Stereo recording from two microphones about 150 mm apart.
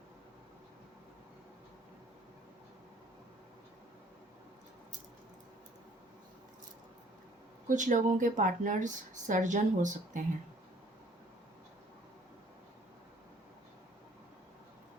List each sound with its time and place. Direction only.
7.7 s speech: 55° right (ahead or behind)